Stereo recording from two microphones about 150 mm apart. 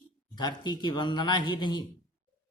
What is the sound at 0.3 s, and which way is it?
A man's voice, 30° left (ahead or behind).